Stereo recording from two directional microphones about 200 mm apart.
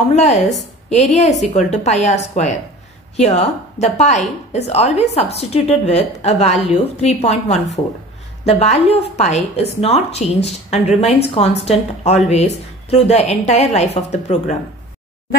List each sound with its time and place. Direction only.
0.1 s a woman's voice: 35° left (ahead or behind)